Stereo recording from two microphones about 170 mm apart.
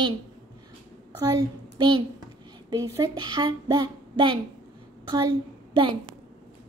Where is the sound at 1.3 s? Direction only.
20° right (ahead or behind).